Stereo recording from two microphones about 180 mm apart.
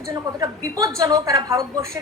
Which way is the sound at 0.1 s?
20° right (ahead or behind).